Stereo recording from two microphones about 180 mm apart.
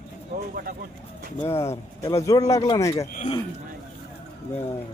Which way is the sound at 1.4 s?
15° left (ahead or behind).